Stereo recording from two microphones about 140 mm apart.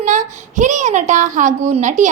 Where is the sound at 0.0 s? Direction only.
60° right (ahead or behind).